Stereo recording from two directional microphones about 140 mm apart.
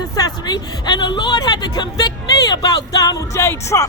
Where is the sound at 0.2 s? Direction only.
30° left (ahead or behind).